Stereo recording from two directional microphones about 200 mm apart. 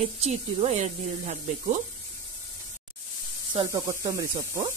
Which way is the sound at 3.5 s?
15° right (ahead or behind).